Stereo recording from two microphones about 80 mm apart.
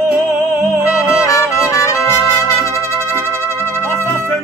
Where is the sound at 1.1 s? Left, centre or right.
Left.